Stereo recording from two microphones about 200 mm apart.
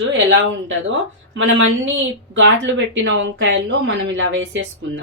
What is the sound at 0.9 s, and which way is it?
Speech, 70° right (ahead or behind).